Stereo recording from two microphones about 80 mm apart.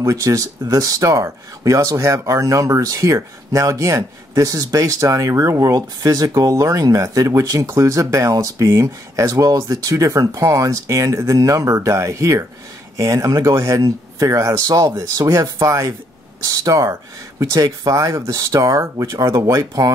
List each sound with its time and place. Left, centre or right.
0.0 s speech: right